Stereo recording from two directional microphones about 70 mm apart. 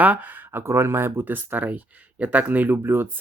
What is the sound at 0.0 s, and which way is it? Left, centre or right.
Speech, right.